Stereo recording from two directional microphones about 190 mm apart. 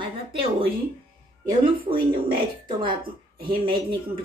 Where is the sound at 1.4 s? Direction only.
25° right (ahead or behind).